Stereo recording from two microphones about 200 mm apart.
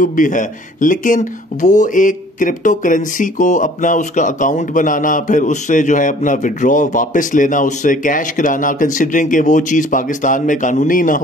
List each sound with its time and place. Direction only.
0.0 s speech: 40° left (ahead or behind)